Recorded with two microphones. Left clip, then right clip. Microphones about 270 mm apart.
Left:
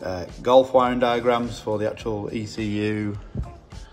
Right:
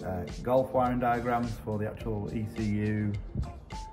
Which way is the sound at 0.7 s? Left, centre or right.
Centre.